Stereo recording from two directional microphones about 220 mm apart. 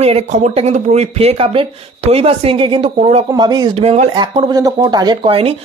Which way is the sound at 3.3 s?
20° right (ahead or behind).